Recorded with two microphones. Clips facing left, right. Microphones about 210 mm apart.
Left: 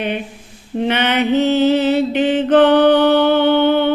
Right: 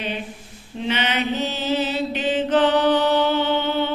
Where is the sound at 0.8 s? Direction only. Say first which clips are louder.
Left 7 dB; 60° left (ahead or behind).